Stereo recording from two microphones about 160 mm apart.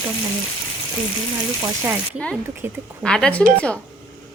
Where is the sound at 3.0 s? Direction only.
5° left (ahead or behind).